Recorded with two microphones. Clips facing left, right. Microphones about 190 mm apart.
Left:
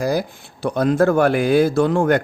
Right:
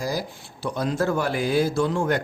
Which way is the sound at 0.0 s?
60° left (ahead or behind).